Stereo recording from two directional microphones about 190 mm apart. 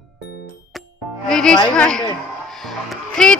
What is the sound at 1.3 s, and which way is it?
A woman's voice, 5° left (ahead or behind).